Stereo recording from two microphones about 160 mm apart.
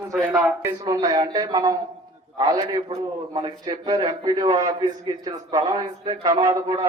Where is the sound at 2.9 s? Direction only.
35° right (ahead or behind).